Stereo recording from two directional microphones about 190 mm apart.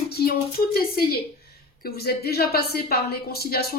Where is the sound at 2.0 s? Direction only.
55° left (ahead or behind).